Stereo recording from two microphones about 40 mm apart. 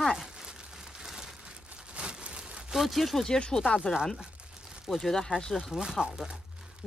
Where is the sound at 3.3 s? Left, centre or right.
Left.